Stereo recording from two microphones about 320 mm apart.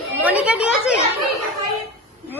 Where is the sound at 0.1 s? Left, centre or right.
Centre.